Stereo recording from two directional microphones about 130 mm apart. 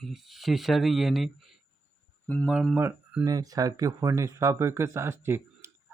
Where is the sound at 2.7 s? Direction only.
10° right (ahead or behind).